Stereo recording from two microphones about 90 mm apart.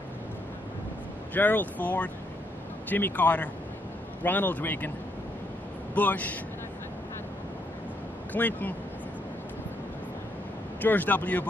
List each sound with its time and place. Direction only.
1.3 s speech: 20° left (ahead or behind)
5.9 s speech: 20° left (ahead or behind)
8.3 s speech: 20° left (ahead or behind)
10.8 s speech: 20° left (ahead or behind)